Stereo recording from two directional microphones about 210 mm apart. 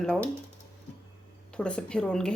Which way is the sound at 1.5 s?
5° left (ahead or behind).